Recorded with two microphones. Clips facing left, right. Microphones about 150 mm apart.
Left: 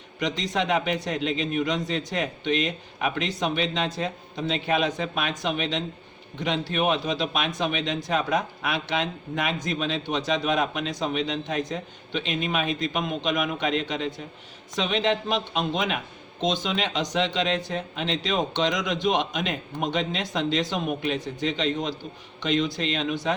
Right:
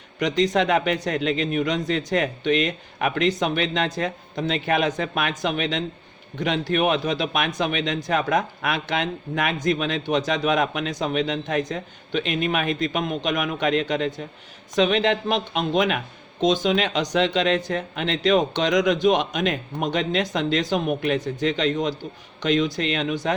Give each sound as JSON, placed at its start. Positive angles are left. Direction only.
{"t": 0.2, "sound": "a man's voice", "side_deg": -50}